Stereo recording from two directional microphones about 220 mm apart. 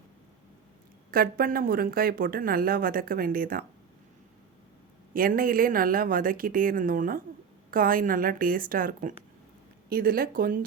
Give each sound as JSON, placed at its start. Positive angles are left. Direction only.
{"t": 1.1, "sound": "a woman's voice", "side_deg": -40}
{"t": 5.1, "sound": "a woman's voice", "side_deg": -40}